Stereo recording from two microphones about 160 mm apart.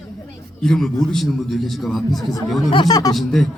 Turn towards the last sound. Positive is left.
turn(degrees=0)  # may be behind; listen again after turning